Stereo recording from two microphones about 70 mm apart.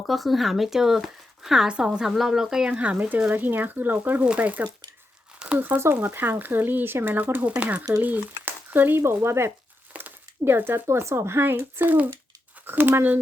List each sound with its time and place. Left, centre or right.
0.1 s speech: centre; by 4.7 s right
5.5 s speech: right